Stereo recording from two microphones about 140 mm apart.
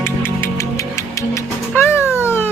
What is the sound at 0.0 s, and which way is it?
Music, 15° left (ahead or behind).